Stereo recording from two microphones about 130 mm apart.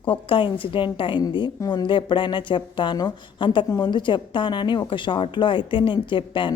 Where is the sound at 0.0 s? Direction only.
40° left (ahead or behind).